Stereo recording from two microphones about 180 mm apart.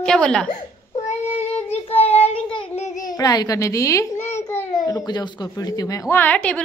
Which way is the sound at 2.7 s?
40° left (ahead or behind).